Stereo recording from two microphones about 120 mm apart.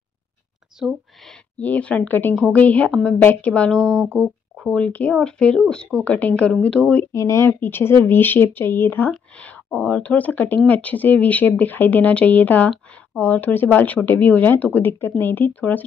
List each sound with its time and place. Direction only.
0.7 s a sound: centre (ahead or behind)
1.6 s speech: 10° left (ahead or behind)
7.1 s speech: 25° left (ahead or behind)